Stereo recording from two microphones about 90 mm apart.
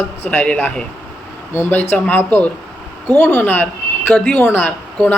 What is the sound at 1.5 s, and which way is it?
Speech, 25° left (ahead or behind).